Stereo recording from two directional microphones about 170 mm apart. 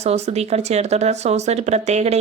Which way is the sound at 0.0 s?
40° right (ahead or behind).